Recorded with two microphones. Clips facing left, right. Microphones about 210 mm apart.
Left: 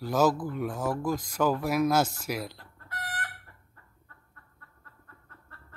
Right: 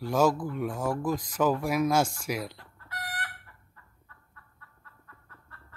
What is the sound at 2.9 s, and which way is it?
Chicken, 50° left (ahead or behind).